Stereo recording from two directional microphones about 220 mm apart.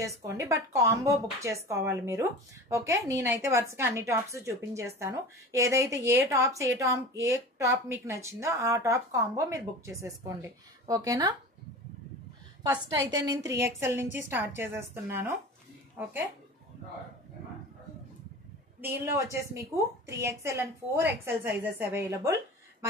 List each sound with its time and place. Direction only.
0.0 s a woman's voice: 15° right (ahead or behind)
13.1 s a woman's voice: 15° right (ahead or behind)
18.8 s a woman's voice: 10° right (ahead or behind)